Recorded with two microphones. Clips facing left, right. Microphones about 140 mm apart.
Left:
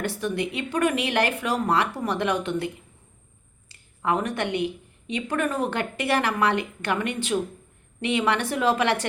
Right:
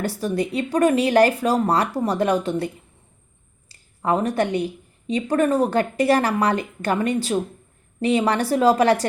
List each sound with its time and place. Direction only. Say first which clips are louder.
0.0 s a woman's voice: right 3 dB; 35° right (ahead or behind)
3.7 s a woman's voice: right 3 dB; 35° right (ahead or behind)